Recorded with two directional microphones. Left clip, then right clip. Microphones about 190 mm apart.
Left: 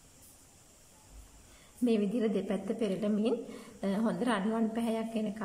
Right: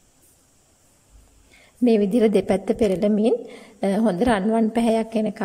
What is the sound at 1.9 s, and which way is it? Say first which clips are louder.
A woman's voice: right 13 dB; 40° right (ahead or behind).